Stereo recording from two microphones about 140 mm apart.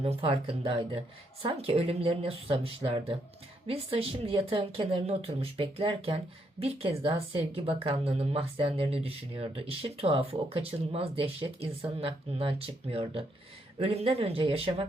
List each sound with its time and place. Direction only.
0.0 s speech: 45° right (ahead or behind)